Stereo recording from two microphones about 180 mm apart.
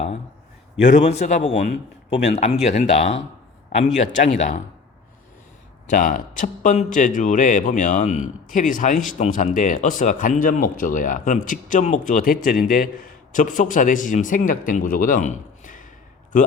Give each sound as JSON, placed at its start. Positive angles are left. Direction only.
{"t": 0.9, "sound": "a man's voice", "side_deg": 40}
{"t": 5.9, "sound": "speech", "side_deg": 50}